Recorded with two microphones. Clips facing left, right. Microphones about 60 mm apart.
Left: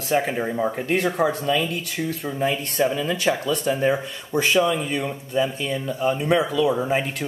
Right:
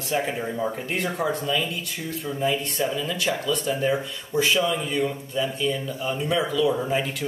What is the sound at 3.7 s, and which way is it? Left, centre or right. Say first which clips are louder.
Speech: left 4 dB; left.